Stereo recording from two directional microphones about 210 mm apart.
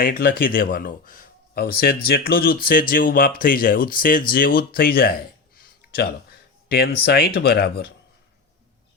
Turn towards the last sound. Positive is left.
turn(degrees=50)  # may be behind; listen again after turning